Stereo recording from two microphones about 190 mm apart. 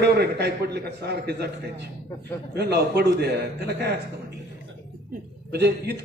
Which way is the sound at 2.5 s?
60° right (ahead or behind).